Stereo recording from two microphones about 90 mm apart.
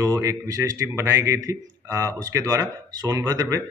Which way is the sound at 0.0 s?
35° right (ahead or behind).